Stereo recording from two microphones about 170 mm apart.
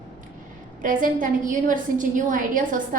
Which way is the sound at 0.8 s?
55° right (ahead or behind).